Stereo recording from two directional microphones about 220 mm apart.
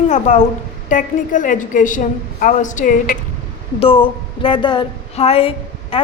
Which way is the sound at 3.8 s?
25° left (ahead or behind).